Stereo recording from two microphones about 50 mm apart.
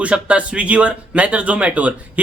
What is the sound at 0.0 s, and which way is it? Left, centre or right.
Speech, right.